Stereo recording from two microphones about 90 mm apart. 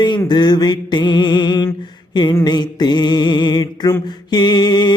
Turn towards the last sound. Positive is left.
turn(degrees=55)  # may be behind; listen again after turning